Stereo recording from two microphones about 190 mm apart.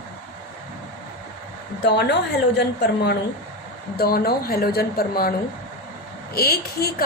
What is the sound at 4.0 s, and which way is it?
A woman's voice, 55° left (ahead or behind).